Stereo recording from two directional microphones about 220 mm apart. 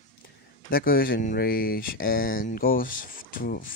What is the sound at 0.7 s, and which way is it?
Speech, 40° left (ahead or behind).